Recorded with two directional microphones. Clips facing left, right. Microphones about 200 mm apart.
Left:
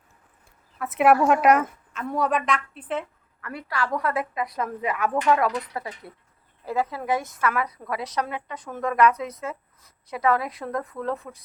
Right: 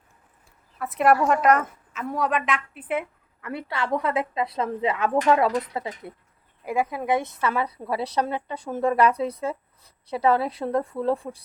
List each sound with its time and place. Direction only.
0.8 s a woman's voice: centre (ahead or behind)
1.9 s a woman's voice: 5° right (ahead or behind)
3.4 s speech: 25° right (ahead or behind)
7.4 s a woman's voice: 30° right (ahead or behind)